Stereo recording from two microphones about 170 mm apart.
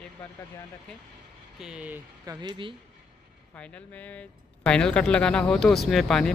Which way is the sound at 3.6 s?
10° left (ahead or behind).